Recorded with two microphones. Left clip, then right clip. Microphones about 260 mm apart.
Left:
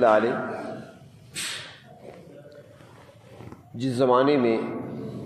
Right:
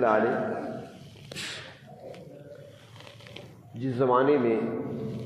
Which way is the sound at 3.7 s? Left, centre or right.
Left.